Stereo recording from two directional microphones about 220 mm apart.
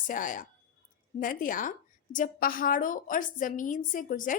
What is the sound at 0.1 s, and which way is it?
A woman's voice, 35° left (ahead or behind).